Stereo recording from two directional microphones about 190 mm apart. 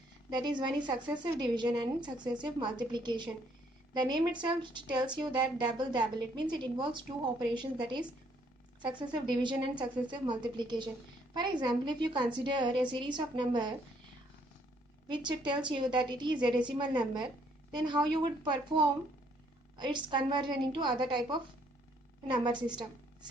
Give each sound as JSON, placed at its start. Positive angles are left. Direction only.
{"t": 0.3, "sound": "a woman's voice", "side_deg": -25}
{"t": 15.1, "sound": "a woman's voice", "side_deg": -25}